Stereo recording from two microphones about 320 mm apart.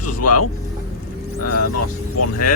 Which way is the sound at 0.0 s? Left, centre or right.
Left.